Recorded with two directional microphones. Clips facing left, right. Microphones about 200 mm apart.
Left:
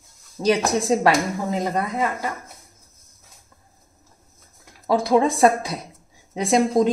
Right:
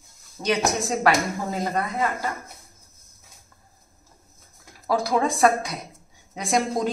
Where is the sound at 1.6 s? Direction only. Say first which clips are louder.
Even; 15° left (ahead or behind).